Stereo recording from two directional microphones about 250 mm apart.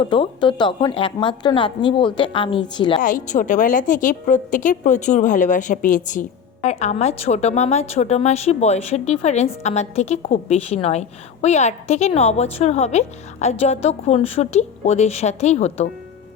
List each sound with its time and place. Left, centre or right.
0.0 s a woman's voice: left
3.0 s a woman's voice: left